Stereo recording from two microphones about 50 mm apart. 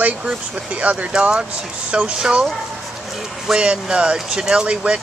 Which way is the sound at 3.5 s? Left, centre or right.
Centre.